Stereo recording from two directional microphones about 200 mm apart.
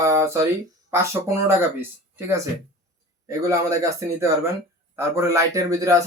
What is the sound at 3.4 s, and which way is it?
Speech, 15° right (ahead or behind).